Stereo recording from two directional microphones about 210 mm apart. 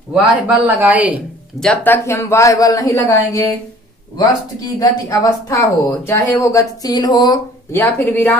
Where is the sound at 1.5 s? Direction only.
5° left (ahead or behind).